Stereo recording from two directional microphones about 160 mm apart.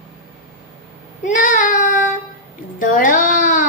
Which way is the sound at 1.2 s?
55° left (ahead or behind).